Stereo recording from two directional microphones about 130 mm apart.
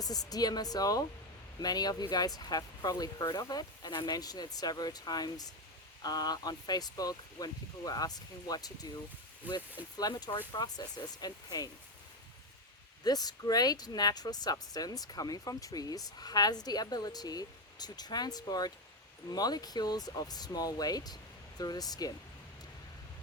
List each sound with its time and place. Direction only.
0.0 s a woman's voice: 30° left (ahead or behind)
9.4 s speech: 10° right (ahead or behind)
10.0 s speech: 30° left (ahead or behind)
13.1 s a woman's voice: 30° left (ahead or behind)